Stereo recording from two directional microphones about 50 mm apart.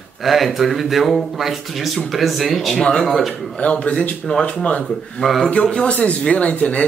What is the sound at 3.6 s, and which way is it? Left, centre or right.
Speech, left.